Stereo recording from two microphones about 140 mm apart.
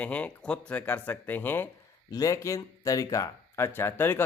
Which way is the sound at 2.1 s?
25° left (ahead or behind).